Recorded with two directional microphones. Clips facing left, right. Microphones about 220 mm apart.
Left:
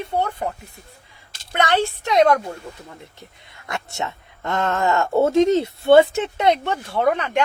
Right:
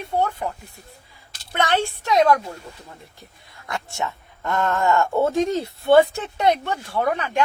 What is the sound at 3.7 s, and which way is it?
Speech, 20° left (ahead or behind).